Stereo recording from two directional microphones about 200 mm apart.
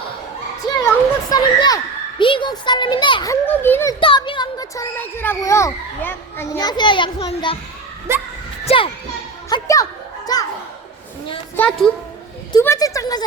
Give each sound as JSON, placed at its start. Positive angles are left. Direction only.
{"t": 0.8, "sound": "a child's voice", "side_deg": 20}
{"t": 3.4, "sound": "speech", "side_deg": 10}
{"t": 4.0, "sound": "speech", "side_deg": 25}
{"t": 8.1, "sound": "speech", "side_deg": -15}
{"t": 8.6, "sound": "a child's voice", "side_deg": 25}
{"t": 9.5, "sound": "speech", "side_deg": 15}
{"t": 11.5, "sound": "speech", "side_deg": 5}